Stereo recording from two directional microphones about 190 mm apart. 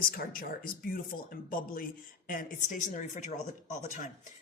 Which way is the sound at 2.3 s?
45° left (ahead or behind).